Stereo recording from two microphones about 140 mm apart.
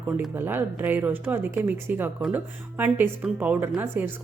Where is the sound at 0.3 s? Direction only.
15° right (ahead or behind).